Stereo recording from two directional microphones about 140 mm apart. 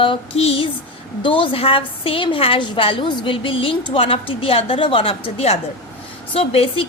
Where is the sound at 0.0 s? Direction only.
40° left (ahead or behind).